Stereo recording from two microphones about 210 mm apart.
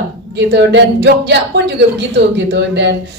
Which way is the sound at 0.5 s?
55° right (ahead or behind).